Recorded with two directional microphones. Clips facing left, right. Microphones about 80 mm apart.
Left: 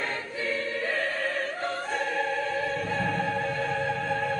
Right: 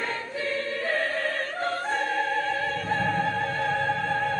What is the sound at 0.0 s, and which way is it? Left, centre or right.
Choir, centre.